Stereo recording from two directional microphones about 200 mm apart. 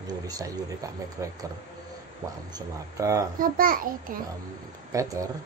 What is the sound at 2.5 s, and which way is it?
Speech, 20° right (ahead or behind).